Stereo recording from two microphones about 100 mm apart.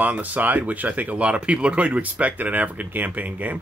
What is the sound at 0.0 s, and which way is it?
Speech, 15° right (ahead or behind).